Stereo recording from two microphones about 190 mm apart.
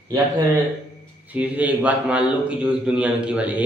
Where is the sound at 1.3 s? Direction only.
5° right (ahead or behind).